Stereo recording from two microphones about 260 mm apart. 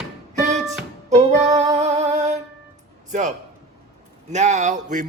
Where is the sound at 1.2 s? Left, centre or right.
Right.